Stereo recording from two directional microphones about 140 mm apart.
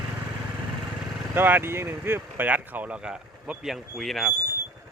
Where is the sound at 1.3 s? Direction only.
15° right (ahead or behind); by 4.3 s centre (ahead or behind).